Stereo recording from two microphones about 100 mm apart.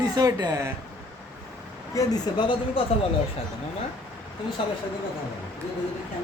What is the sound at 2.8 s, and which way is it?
Speech, 65° left (ahead or behind).